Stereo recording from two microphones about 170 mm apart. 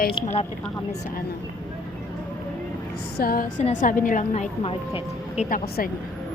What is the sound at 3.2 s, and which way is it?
A woman's voice, 60° left (ahead or behind).